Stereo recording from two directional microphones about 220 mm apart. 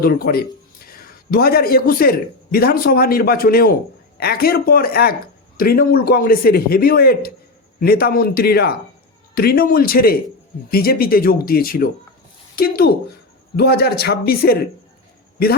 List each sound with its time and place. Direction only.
0.0 s a man's voice: 40° left (ahead or behind)